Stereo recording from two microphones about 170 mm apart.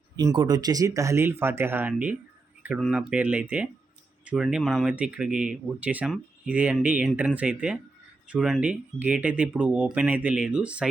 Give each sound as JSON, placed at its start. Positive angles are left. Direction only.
{"t": 0.2, "sound": "speech", "side_deg": -20}